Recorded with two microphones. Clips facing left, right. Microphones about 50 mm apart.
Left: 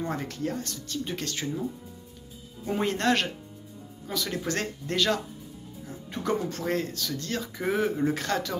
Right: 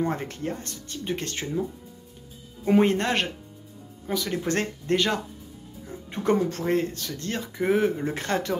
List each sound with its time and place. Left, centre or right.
0.0 s speech: right
2.8 s speech: right
4.5 s speech: right